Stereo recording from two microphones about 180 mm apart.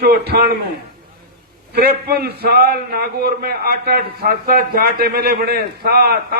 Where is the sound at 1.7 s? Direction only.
60° right (ahead or behind).